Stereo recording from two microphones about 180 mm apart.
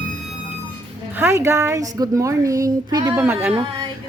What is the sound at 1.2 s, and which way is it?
A woman's voice, 15° right (ahead or behind).